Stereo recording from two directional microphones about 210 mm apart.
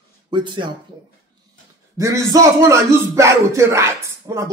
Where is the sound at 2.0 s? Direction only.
15° right (ahead or behind).